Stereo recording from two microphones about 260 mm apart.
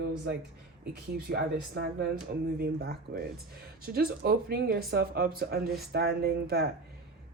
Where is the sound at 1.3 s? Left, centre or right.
Right.